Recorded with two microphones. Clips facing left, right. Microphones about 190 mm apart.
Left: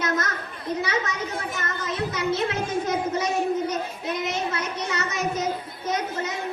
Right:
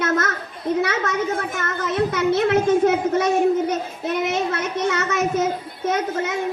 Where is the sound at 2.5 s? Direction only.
60° right (ahead or behind).